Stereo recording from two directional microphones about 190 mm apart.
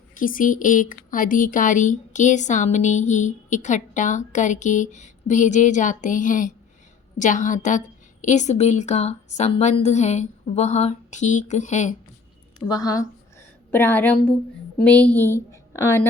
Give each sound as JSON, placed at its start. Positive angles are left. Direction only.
{"t": 0.1, "sound": "speech", "side_deg": 45}
{"t": 12.6, "sound": "a woman's voice", "side_deg": 20}